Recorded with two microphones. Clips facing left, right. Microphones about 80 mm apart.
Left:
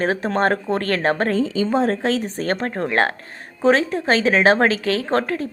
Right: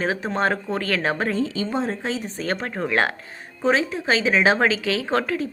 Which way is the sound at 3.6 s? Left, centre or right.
Left.